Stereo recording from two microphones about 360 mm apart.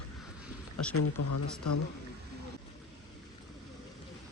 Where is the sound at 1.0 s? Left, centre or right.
Left.